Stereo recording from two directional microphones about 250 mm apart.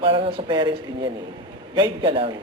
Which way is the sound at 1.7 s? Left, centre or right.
Centre.